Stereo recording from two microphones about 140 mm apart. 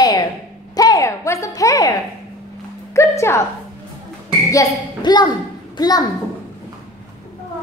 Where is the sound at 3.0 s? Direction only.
20° left (ahead or behind).